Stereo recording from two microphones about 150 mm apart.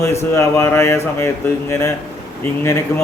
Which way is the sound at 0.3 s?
20° left (ahead or behind).